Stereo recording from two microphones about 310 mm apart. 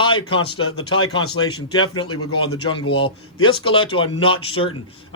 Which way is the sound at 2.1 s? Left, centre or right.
Left.